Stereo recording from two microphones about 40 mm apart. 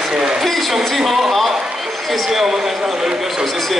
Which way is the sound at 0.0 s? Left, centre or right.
Centre.